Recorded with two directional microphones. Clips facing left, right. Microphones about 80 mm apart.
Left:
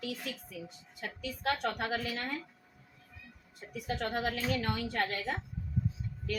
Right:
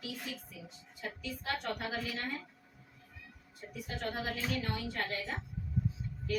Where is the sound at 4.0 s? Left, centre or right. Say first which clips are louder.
Left 2 dB; left.